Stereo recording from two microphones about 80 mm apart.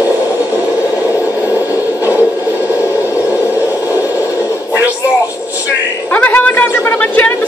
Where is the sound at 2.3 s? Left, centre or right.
Right.